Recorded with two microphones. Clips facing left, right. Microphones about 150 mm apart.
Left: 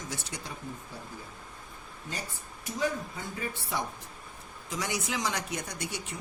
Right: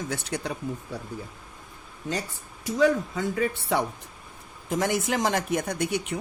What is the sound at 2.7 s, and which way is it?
Speech, 85° right.